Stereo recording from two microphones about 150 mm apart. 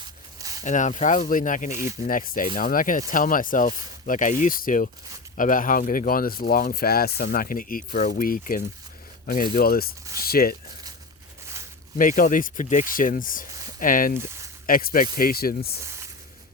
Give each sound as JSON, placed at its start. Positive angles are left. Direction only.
{"t": 0.0, "sound": "a sound", "side_deg": -25}
{"t": 0.6, "sound": "speech", "side_deg": 55}
{"t": 1.7, "sound": "speech", "side_deg": -20}
{"t": 2.0, "sound": "speech", "side_deg": 65}
{"t": 11.9, "sound": "speech", "side_deg": 65}
{"t": 15.8, "sound": "a sound", "side_deg": -20}